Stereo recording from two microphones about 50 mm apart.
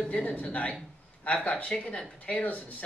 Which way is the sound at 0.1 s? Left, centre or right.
Left.